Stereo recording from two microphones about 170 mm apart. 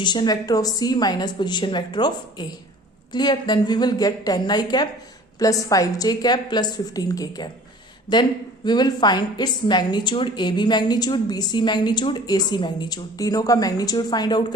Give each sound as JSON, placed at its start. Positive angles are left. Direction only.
{"t": 0.0, "sound": "a woman's voice", "side_deg": 25}